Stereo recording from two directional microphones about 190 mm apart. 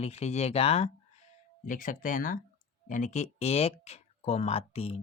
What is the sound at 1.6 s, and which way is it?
Speech, 45° left (ahead or behind).